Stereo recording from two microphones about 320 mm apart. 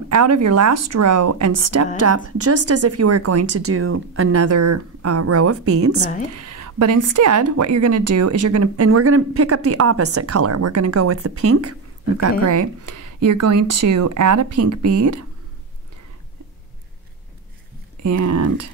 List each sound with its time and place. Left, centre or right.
0.1 s a woman's voice: right
18.0 s a woman's voice: right